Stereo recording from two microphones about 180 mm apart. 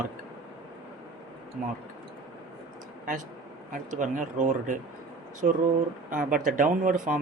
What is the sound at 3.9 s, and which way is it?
Speech, 45° right (ahead or behind).